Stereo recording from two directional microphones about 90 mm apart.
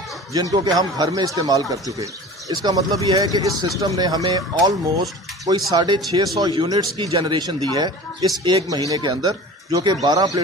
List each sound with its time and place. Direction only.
0.3 s a man's voice: 40° right (ahead or behind)
7.1 s speech: 75° right (ahead or behind)
7.3 s a man's voice: 50° right (ahead or behind)